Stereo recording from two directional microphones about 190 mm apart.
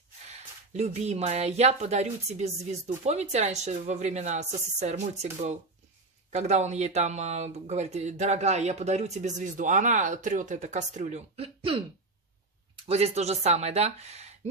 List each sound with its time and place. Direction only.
0.3 s speech: 35° right (ahead or behind)
12.8 s speech: 35° right (ahead or behind)